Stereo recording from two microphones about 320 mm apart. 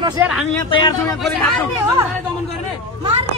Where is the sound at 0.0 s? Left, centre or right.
Centre.